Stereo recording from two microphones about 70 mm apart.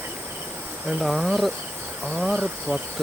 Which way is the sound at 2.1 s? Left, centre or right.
Centre.